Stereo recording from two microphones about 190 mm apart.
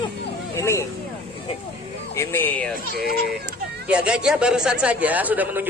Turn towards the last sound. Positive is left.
turn(degrees=-10)  # may be behind; listen again after turning